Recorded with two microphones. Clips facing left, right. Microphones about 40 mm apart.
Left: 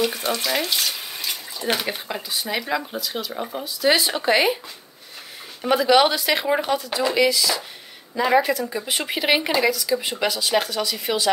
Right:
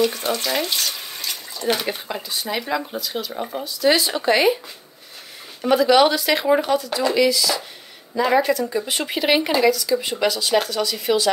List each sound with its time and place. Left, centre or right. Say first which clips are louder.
0.0 s speech: right 2 dB; centre
3.6 s speech: right 1 dB; centre
5.7 s speech: right 2 dB; centre
6.6 s speech: right 2 dB; left